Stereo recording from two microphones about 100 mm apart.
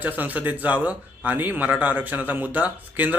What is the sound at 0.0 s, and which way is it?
Speech, 15° right (ahead or behind).